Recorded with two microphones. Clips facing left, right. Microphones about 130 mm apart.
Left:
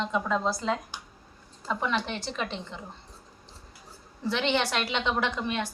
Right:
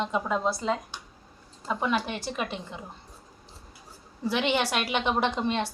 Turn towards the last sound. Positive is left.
turn(degrees=-20)  # may be behind; listen again after turning